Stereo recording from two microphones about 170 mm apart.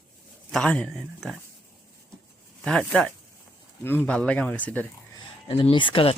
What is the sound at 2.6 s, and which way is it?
Speech, 5° left (ahead or behind).